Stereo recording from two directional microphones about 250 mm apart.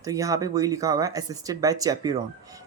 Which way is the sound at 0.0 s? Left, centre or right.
Centre.